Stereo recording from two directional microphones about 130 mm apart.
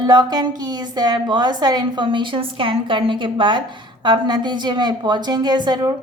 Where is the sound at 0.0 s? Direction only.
30° right (ahead or behind).